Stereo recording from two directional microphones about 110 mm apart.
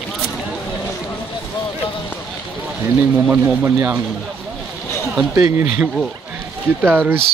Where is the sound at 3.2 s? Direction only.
15° right (ahead or behind).